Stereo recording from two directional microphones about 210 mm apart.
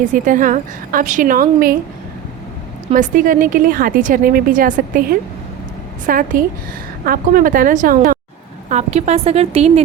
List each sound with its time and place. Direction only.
0.0 s a woman's voice: 40° right (ahead or behind)
2.9 s a woman's voice: 40° right (ahead or behind)
6.1 s a woman's voice: 40° right (ahead or behind)